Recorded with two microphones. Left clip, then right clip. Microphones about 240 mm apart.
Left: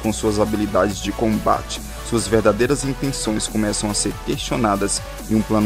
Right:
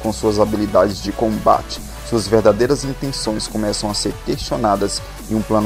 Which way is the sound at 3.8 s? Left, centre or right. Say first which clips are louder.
Right 2 dB; left.